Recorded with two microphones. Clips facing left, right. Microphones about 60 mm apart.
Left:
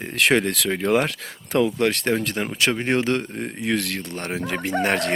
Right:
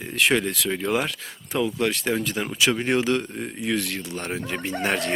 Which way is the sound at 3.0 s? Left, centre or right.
Left.